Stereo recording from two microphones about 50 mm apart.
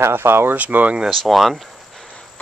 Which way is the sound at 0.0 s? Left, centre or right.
Right.